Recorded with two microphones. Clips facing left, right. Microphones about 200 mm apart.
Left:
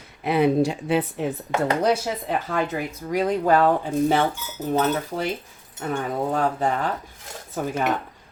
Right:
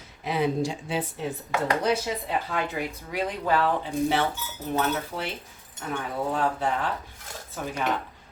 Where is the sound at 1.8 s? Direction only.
45° left (ahead or behind).